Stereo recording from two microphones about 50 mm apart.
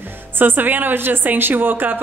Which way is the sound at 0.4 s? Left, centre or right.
Right.